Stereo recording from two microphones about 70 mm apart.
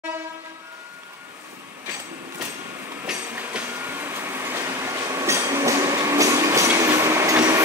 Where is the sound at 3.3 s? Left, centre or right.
Right.